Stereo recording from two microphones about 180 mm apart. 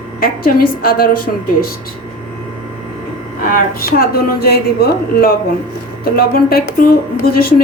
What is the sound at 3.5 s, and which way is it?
A woman's voice, 55° left (ahead or behind).